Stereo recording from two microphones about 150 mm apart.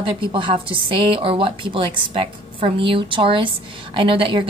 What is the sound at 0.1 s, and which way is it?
A woman's voice, 35° right (ahead or behind).